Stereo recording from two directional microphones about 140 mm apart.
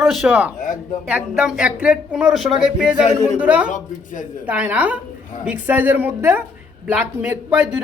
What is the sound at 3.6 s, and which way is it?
Speech, 65° left (ahead or behind).